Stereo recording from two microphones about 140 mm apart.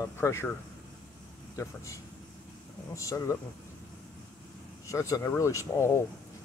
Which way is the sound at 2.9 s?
20° left (ahead or behind).